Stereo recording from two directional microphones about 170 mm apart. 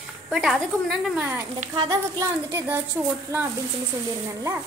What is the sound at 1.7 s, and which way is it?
Speech, 20° right (ahead or behind).